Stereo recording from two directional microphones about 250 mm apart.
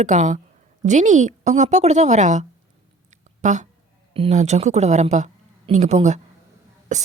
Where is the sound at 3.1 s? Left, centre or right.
Right.